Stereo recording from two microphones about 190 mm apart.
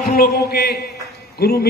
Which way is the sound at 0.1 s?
55° left (ahead or behind).